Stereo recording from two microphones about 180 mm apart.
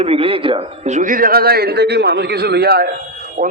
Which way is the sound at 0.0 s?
30° right (ahead or behind).